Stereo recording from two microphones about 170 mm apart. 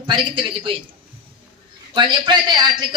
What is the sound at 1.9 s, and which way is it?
Speech, 25° right (ahead or behind).